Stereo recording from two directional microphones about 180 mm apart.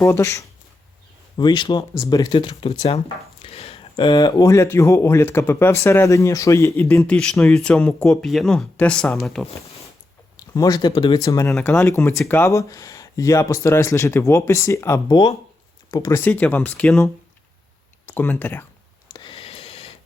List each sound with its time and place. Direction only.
0.0 s speech: 15° left (ahead or behind)
7.2 s speech: 5° left (ahead or behind)
10.4 s speech: 20° left (ahead or behind)
11.5 s speech: 5° left (ahead or behind)
18.1 s speech: 10° left (ahead or behind)
19.1 s a sound: 25° left (ahead or behind)